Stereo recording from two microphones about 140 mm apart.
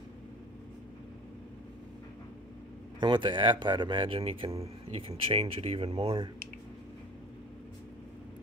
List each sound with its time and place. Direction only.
3.0 s speech: 35° right (ahead or behind)